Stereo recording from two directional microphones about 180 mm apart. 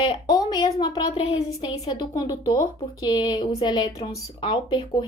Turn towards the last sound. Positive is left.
turn(degrees=25)  # may be behind; listen again after turning